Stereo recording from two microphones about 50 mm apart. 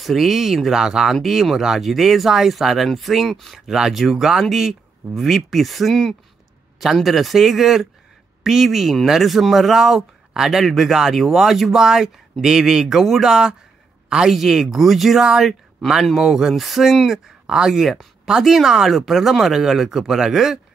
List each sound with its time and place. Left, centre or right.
0.0 s speech: centre
14.3 s speech: centre